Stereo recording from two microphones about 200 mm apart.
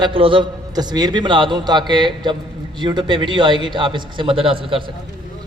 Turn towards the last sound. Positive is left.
turn(degrees=-25)  # may be behind; listen again after turning